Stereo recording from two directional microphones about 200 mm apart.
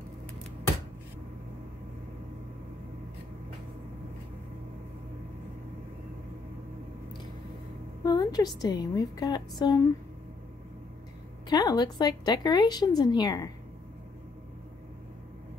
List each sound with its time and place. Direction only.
8.0 s a woman's voice: 20° left (ahead or behind)
11.4 s a woman's voice: 20° left (ahead or behind)